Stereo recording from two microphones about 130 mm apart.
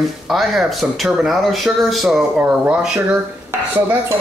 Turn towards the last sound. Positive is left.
turn(degrees=-20)  # may be behind; listen again after turning